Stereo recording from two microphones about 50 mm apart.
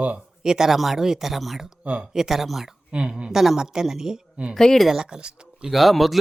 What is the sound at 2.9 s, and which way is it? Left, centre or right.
Speech, centre.